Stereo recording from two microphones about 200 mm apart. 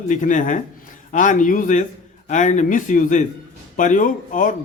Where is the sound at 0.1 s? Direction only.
40° left (ahead or behind).